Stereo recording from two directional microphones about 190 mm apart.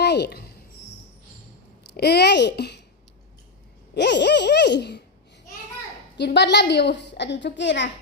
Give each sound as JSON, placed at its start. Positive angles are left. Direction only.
{"t": 0.0, "sound": "a sound", "side_deg": 60}
{"t": 1.9, "sound": "a woman's voice", "side_deg": 60}
{"t": 3.9, "sound": "a woman's voice", "side_deg": 65}
{"t": 6.1, "sound": "a woman's voice", "side_deg": 65}